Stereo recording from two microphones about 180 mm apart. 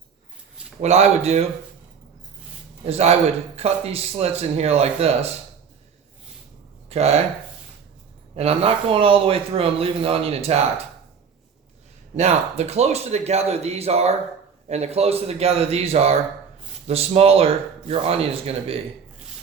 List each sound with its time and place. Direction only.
0.8 s a man's voice: 35° right (ahead or behind)
2.8 s a man's voice: 35° right (ahead or behind)
6.9 s a man's voice: 35° right (ahead or behind)
8.4 s a man's voice: 35° right (ahead or behind)
12.1 s a man's voice: 40° right (ahead or behind)